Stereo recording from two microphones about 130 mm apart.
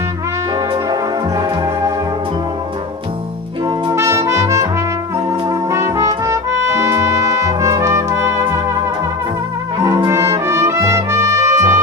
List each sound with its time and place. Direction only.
3.9 s music: 20° right (ahead or behind)
5.5 s trumpet: 20° right (ahead or behind)
10.0 s music: 20° right (ahead or behind)